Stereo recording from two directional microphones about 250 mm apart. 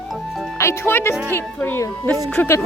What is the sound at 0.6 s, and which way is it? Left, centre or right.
Speech, centre.